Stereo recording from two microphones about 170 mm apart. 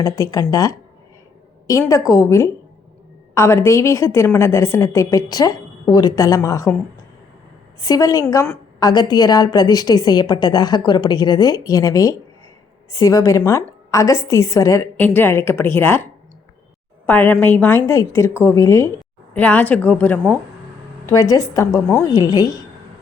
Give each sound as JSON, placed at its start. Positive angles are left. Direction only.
{"t": 0.0, "sound": "a woman's voice", "side_deg": 20}
{"t": 7.8, "sound": "a woman's voice", "side_deg": 20}
{"t": 17.1, "sound": "a woman's voice", "side_deg": 10}
{"t": 21.1, "sound": "a woman's voice", "side_deg": 20}